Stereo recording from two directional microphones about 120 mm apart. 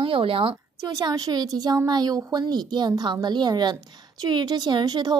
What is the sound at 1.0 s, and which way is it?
Speech, 30° right (ahead or behind).